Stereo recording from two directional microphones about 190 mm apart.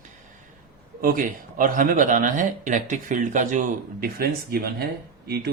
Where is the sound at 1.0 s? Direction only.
45° right (ahead or behind).